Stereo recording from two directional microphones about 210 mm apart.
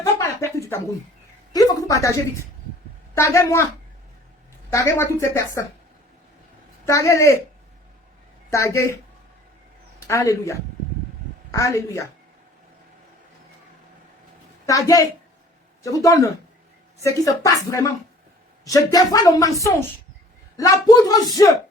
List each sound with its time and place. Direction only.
0.0 s a sound: 10° left (ahead or behind)
1.5 s a man's voice: 15° left (ahead or behind)
4.7 s speech: 15° left (ahead or behind)
6.8 s speech: 15° left (ahead or behind)
8.5 s speech: 15° left (ahead or behind)
10.1 s speech: 15° left (ahead or behind)
14.7 s speech: 15° left (ahead or behind)
20.6 s speech: 15° left (ahead or behind)